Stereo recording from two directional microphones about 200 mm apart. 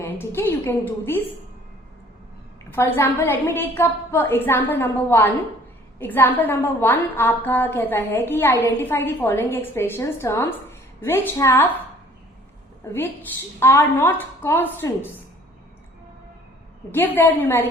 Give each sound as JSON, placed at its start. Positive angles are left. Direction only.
{"t": 0.0, "sound": "a woman's voice", "side_deg": 10}
{"t": 2.7, "sound": "a woman's voice", "side_deg": 10}
{"t": 12.8, "sound": "a woman's voice", "side_deg": 10}
{"t": 16.9, "sound": "a woman's voice", "side_deg": 10}